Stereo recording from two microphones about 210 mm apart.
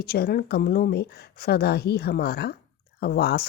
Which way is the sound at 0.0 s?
45° left (ahead or behind).